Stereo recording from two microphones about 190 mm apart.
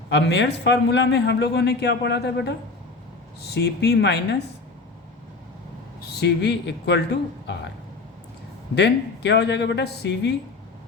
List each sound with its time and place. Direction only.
0.1 s a man's voice: 65° left (ahead or behind)
3.5 s a man's voice: 60° left (ahead or behind)
6.0 s speech: 60° left (ahead or behind)
8.7 s a man's voice: 65° left (ahead or behind)